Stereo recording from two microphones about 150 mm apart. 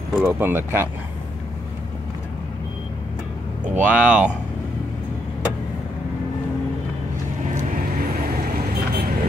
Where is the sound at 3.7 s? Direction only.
10° right (ahead or behind).